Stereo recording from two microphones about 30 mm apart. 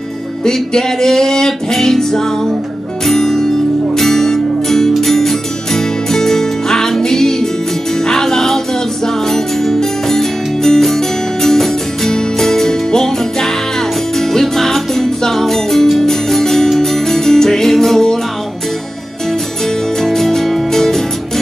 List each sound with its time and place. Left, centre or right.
0.5 s music: centre
20.0 s music: centre